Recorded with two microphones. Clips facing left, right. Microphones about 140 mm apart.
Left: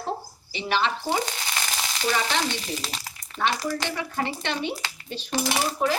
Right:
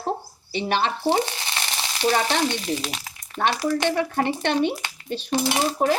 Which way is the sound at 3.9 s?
55° right (ahead or behind).